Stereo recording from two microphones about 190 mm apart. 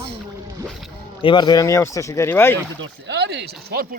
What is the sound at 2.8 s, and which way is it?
Speech, 65° right (ahead or behind).